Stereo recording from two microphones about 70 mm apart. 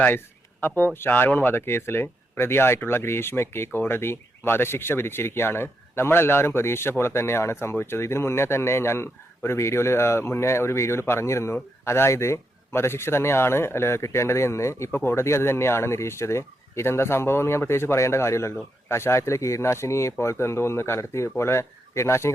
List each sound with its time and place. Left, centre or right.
0.9 s speech: left